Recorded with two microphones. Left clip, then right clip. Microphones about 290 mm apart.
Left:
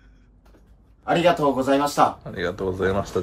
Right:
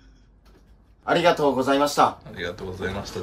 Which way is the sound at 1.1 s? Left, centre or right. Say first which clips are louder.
Even; centre.